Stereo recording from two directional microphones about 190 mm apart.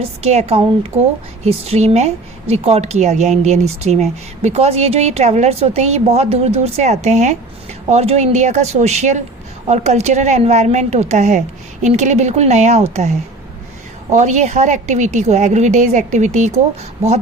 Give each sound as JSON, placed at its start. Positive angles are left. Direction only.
{"t": 0.0, "sound": "speech", "side_deg": -35}